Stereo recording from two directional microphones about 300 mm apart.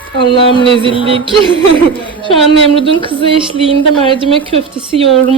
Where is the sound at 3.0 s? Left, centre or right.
Centre.